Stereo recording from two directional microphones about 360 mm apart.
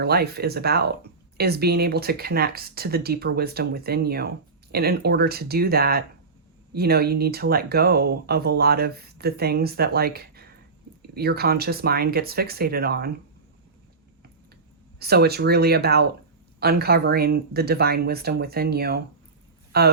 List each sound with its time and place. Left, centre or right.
0.0 s speech: right
14.9 s speech: right